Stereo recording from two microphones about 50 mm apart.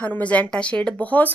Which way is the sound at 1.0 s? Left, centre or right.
Left.